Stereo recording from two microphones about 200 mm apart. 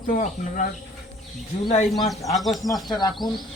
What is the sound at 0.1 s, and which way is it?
Speech, 40° left (ahead or behind).